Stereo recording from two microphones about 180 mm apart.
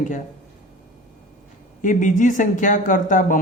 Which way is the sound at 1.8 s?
45° left (ahead or behind).